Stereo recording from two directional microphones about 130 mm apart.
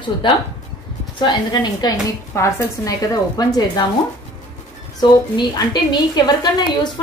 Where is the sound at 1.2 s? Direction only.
35° left (ahead or behind).